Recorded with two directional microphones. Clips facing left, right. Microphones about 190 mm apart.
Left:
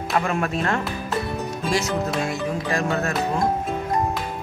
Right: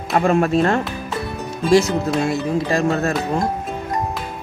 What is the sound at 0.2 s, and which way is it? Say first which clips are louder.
Speech: right 8 dB; 30° right (ahead or behind).